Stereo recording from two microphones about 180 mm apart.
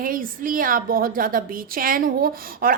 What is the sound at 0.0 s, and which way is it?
A woman's voice, 50° right (ahead or behind).